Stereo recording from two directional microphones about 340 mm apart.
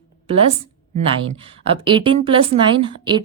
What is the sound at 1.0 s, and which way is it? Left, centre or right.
Speech, centre.